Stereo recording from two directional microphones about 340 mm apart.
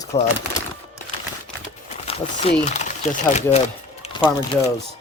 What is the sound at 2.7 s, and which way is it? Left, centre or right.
Speech, centre.